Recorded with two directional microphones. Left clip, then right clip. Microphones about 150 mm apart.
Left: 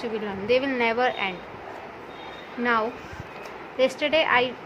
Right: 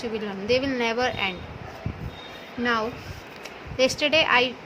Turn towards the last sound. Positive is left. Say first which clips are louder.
# right 1 dB
turn(degrees=-45)  # may be behind; listen again after turning